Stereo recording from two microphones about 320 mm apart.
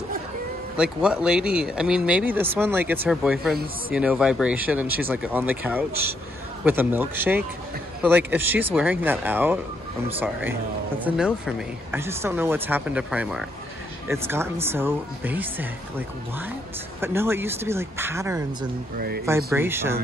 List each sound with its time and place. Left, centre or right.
0.7 s speech: centre
17.0 s speech: centre
18.9 s speech: right
19.2 s speech: centre